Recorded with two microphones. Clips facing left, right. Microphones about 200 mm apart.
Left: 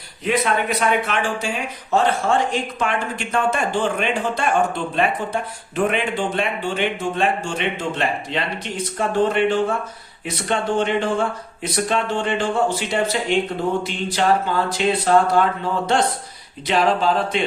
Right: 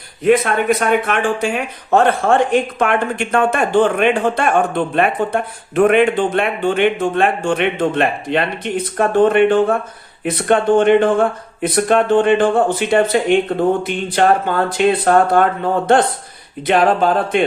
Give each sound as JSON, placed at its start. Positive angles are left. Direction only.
{"t": 0.3, "sound": "speech", "side_deg": -50}